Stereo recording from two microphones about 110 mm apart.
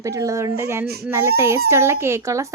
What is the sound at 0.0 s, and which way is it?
A child's voice, 30° right (ahead or behind).